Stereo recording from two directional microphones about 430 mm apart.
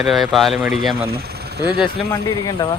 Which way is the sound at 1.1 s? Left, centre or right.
Right.